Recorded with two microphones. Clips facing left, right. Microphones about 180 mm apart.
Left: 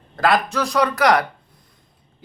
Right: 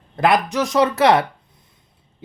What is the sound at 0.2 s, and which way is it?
Speech, 20° right (ahead or behind).